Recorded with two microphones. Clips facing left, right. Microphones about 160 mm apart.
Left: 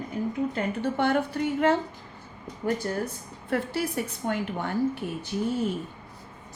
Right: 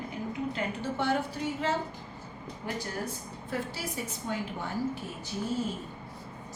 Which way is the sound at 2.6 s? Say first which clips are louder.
Left 9 dB; 45° left (ahead or behind).